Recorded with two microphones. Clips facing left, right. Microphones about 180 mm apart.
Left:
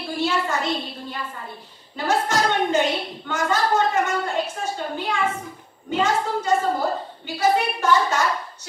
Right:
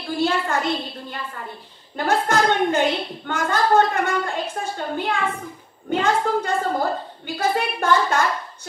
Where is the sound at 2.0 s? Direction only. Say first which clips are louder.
Right 2 dB; 55° right (ahead or behind).